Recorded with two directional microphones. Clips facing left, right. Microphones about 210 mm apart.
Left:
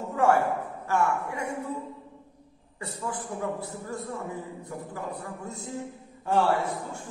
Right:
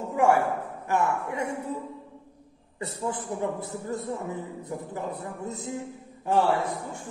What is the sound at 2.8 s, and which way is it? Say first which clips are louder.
A man's voice: right 3 dB; 20° right (ahead or behind).